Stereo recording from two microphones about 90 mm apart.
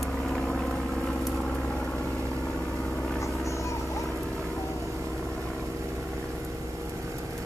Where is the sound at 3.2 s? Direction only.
35° left (ahead or behind).